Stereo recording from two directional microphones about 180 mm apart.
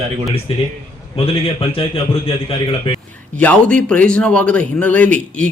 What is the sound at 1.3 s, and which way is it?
Speech, 30° left (ahead or behind).